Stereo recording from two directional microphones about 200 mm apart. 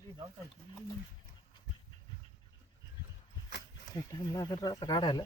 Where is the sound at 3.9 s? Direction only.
20° left (ahead or behind).